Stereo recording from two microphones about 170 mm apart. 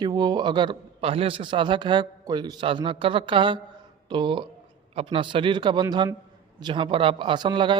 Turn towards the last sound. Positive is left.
turn(degrees=-25)  # may be behind; listen again after turning